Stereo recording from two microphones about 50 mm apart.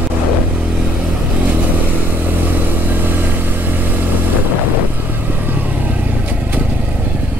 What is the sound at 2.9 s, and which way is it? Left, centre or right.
Vehicle, right.